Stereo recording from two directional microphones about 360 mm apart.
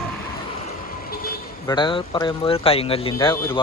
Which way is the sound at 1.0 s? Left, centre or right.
Left.